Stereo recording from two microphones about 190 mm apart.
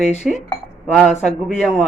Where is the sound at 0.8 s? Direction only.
Centre (ahead or behind).